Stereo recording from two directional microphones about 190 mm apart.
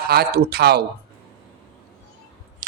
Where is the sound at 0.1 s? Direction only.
55° right (ahead or behind).